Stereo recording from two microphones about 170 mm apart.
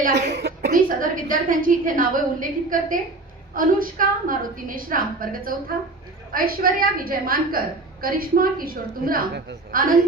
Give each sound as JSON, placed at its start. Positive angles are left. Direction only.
{"t": 0.2, "sound": "speech", "side_deg": -80}
{"t": 0.7, "sound": "a woman's voice", "side_deg": -50}